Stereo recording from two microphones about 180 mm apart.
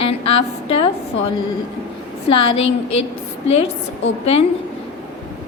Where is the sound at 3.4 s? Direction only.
35° left (ahead or behind).